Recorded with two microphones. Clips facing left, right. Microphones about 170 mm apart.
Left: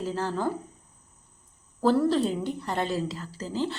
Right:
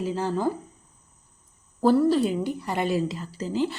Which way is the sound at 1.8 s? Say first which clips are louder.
Right 3 dB; 10° right (ahead or behind).